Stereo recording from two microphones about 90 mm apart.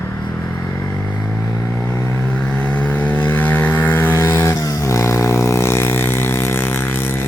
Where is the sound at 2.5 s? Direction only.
15° left (ahead or behind).